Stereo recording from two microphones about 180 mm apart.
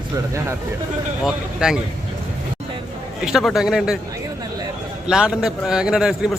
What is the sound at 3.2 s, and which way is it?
Speech, centre (ahead or behind).